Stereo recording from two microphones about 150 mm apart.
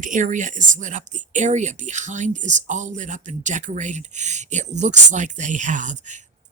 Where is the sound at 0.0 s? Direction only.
60° right (ahead or behind).